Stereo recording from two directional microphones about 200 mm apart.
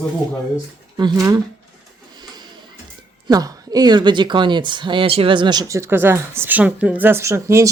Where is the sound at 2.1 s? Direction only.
20° right (ahead or behind).